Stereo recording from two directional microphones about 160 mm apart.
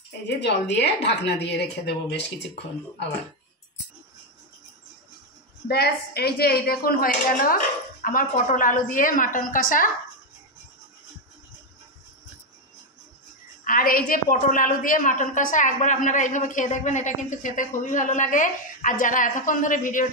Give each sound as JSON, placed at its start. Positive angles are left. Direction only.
{"t": 0.4, "sound": "speech", "side_deg": 90}
{"t": 5.7, "sound": "a woman's voice", "side_deg": 80}
{"t": 13.7, "sound": "a woman's voice", "side_deg": 60}